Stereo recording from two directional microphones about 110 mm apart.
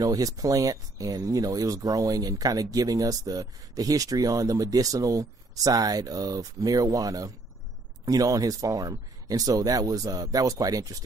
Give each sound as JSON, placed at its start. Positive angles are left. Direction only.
{"t": 0.0, "sound": "speech", "side_deg": -35}